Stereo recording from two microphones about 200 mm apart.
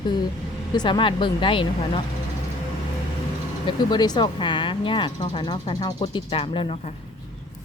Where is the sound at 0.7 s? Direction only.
20° left (ahead or behind).